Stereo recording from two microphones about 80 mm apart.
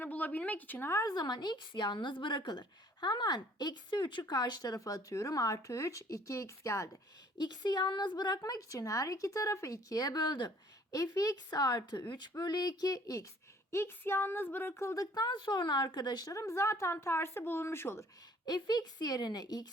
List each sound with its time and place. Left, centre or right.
0.0 s speech: centre
1.0 s a woman's voice: left
7.3 s a woman's voice: left
8.4 s speech: left
10.9 s a woman's voice: left
13.7 s speech: left
15.0 s a woman's voice: left
16.3 s speech: left
18.4 s a woman's voice: left